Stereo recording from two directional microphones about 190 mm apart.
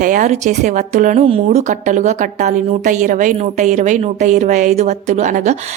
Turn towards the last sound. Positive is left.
turn(degrees=-40)  # may be behind; listen again after turning